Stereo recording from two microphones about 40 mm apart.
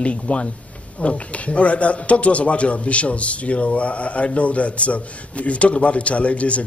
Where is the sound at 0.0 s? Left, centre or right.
Left.